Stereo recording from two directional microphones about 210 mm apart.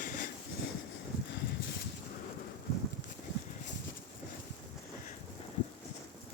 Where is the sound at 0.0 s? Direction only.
40° left (ahead or behind).